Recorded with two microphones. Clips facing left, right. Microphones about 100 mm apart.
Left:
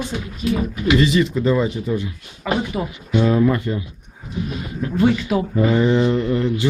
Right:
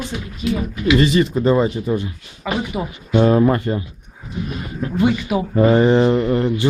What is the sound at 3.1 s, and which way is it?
Speech, 45° right (ahead or behind).